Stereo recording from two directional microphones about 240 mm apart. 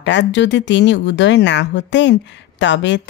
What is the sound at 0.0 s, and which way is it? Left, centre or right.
Speech, left.